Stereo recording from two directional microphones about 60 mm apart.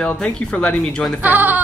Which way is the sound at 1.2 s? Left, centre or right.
Right.